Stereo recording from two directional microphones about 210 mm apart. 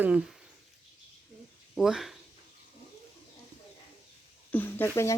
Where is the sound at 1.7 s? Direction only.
Centre (ahead or behind).